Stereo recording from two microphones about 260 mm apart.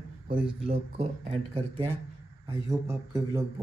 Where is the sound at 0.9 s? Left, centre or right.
Right.